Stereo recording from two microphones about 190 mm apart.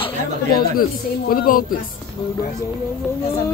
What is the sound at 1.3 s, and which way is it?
Speech, 50° left (ahead or behind).